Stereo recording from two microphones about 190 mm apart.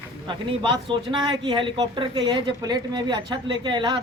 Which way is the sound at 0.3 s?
25° right (ahead or behind).